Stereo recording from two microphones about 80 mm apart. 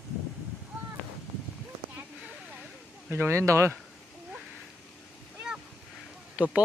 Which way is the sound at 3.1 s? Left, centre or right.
Right.